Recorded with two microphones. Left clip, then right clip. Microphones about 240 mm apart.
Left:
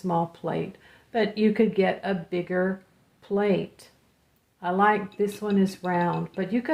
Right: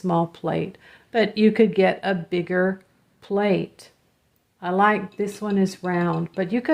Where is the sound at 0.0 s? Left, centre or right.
Right.